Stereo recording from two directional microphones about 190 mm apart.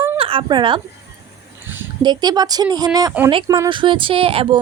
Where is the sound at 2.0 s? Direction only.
20° right (ahead or behind).